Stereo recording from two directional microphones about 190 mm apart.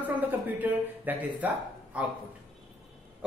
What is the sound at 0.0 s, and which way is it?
Speech, 10° right (ahead or behind).